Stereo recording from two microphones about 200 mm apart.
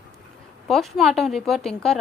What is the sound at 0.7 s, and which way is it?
A woman's voice, centre (ahead or behind).